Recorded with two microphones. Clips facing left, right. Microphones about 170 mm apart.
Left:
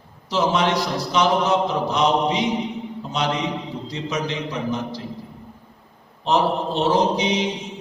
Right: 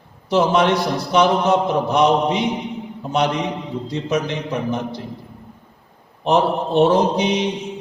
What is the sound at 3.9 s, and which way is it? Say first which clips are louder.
A man's voice: right 5 dB; 55° right (ahead or behind).